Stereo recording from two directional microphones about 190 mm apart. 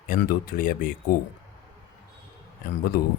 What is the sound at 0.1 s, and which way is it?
Speech, 50° left (ahead or behind).